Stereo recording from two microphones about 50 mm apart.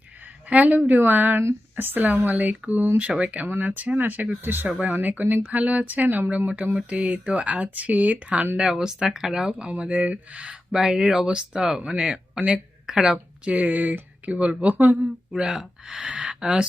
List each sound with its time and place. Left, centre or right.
0.5 s speech: right
0.9 s speech: right
3.1 s speech: right
3.4 s speech: right
4.8 s speech: right
8.5 s speech: centre
10.7 s speech: centre
13.5 s speech: right
14.7 s speech: right
15.4 s speech: centre